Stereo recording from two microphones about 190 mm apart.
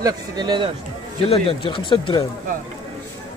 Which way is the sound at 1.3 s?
30° left (ahead or behind).